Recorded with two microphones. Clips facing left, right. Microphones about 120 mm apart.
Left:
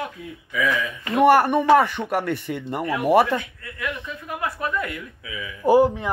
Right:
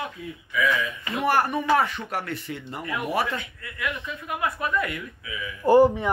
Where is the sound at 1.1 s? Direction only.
65° left (ahead or behind).